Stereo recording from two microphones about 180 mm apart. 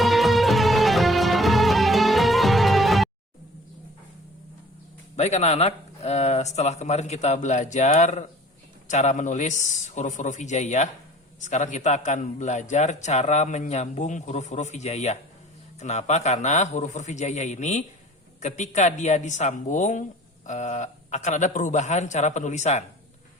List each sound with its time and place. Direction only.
0.0 s music: centre (ahead or behind)
5.1 s a man's voice: 40° left (ahead or behind)